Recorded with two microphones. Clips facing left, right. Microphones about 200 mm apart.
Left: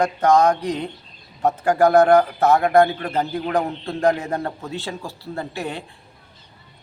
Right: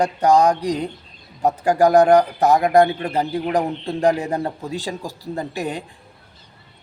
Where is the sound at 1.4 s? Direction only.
15° right (ahead or behind).